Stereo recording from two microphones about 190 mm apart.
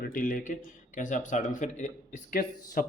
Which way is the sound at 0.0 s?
45° left (ahead or behind).